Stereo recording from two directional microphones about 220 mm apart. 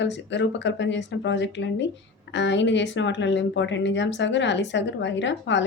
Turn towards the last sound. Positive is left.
turn(degrees=55)  # may be behind; listen again after turning